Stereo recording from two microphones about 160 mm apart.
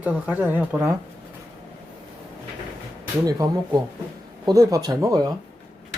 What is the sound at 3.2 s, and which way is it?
Speech, 20° right (ahead or behind).